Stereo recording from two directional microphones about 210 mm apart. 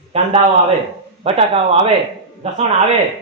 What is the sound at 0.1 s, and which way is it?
A man's voice, 30° right (ahead or behind).